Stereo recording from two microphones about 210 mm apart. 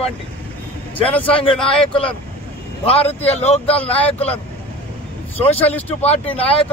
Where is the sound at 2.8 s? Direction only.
30° left (ahead or behind).